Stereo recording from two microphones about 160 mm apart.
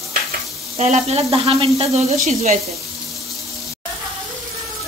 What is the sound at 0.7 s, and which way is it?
Speech, 45° right (ahead or behind).